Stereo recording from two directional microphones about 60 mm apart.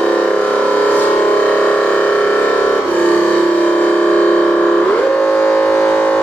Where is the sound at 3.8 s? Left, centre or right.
Left.